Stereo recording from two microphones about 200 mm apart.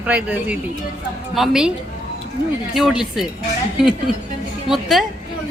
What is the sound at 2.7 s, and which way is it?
Speech, centre (ahead or behind).